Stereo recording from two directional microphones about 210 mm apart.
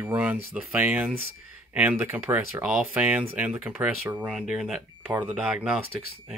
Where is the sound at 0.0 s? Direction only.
5° right (ahead or behind).